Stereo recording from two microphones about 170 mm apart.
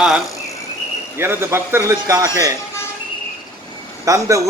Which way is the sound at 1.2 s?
15° right (ahead or behind).